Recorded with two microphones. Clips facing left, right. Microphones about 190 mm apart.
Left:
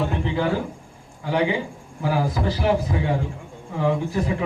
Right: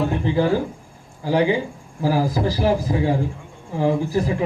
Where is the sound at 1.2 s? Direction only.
35° right (ahead or behind).